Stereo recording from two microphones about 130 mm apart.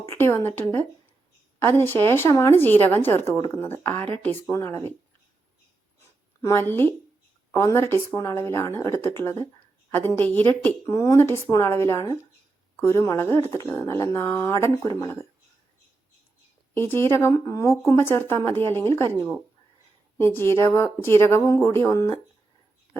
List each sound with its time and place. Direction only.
0.0 s speech: 20° left (ahead or behind)
6.4 s speech: 20° left (ahead or behind)
10.1 s speech: 15° left (ahead or behind)
16.7 s speech: 15° left (ahead or behind)